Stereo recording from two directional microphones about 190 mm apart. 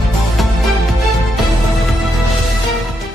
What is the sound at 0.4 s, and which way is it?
Music, centre (ahead or behind).